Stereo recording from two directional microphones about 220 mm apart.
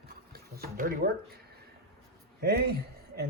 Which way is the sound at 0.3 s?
45° right (ahead or behind).